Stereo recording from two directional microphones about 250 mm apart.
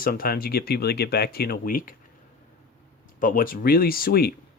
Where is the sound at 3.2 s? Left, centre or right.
Left.